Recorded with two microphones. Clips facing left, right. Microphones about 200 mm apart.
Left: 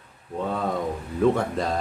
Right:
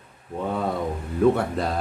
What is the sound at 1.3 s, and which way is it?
Speech, 5° right (ahead or behind).